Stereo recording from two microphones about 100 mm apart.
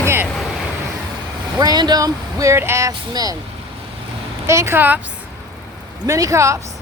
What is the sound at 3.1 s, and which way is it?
Speech, 40° right (ahead or behind).